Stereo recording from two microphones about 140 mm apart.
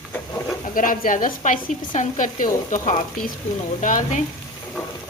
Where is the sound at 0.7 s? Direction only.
75° left (ahead or behind).